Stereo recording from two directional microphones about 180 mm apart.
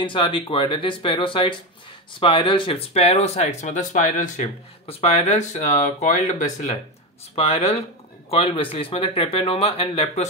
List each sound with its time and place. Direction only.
0.0 s speech: 30° left (ahead or behind); by 4.5 s 45° left (ahead or behind)
4.8 s speech: 35° left (ahead or behind)